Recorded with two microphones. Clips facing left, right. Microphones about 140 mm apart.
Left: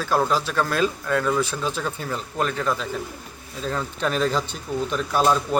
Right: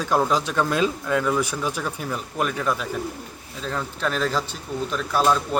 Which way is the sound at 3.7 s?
Centre (ahead or behind).